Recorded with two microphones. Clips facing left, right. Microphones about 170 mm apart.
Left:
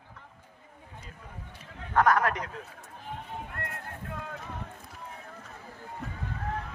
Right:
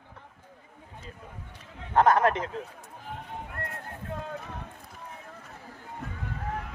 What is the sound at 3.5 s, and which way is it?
Run, 30° right (ahead or behind).